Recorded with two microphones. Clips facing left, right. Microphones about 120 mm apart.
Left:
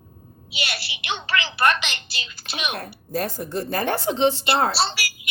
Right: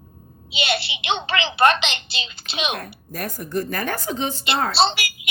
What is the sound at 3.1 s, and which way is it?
Speech, 30° left (ahead or behind).